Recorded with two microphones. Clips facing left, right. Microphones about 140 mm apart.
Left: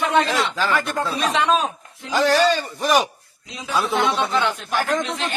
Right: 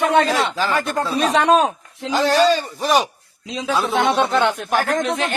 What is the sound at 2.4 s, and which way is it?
Speech, 30° right (ahead or behind).